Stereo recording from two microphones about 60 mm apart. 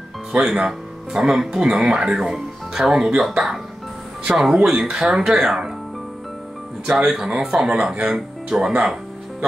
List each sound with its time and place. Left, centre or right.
0.3 s speech: centre
6.9 s speech: centre